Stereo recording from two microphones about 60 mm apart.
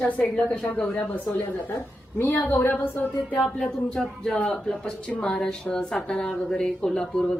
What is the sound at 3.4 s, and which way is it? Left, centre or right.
Speech, centre.